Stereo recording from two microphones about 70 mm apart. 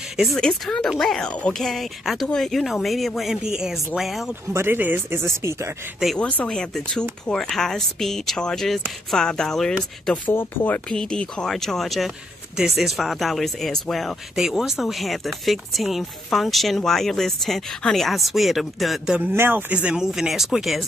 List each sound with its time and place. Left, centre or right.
0.4 s speech: centre
4.5 s speech: right
6.1 s speech: centre
10.3 s speech: left
10.9 s speech: centre
19.3 s speech: right
19.7 s speech: centre
20.0 s speech: centre